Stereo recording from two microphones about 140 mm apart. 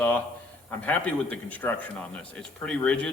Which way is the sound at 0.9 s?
10° left (ahead or behind).